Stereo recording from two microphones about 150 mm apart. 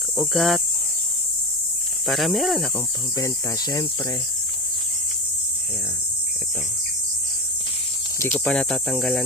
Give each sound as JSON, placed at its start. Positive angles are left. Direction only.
{"t": 0.2, "sound": "speech", "side_deg": 0}
{"t": 2.0, "sound": "speech", "side_deg": 0}
{"t": 3.2, "sound": "speech", "side_deg": 25}
{"t": 8.3, "sound": "speech", "side_deg": 5}